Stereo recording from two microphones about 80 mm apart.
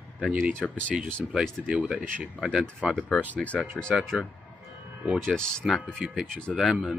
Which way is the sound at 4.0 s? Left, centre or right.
Centre.